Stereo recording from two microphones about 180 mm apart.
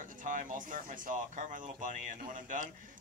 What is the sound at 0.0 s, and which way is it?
Speech, 45° right (ahead or behind).